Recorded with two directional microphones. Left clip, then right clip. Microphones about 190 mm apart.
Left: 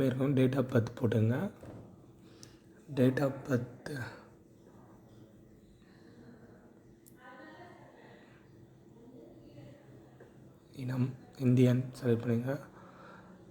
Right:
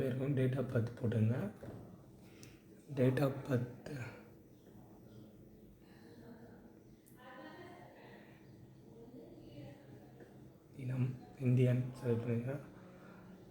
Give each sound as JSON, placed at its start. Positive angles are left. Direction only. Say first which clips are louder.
{"t": 0.0, "sound": "speech", "louder": "left 7 dB", "side_deg": 30}
{"t": 2.9, "sound": "speech", "louder": "left 4 dB", "side_deg": 15}
{"t": 10.8, "sound": "speech", "louder": "left 6 dB", "side_deg": 20}